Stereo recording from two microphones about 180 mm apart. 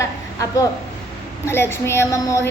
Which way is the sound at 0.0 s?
15° left (ahead or behind).